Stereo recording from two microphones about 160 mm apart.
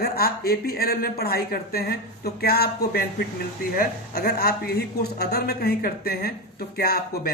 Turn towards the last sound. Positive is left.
turn(degrees=75)  # may be behind; listen again after turning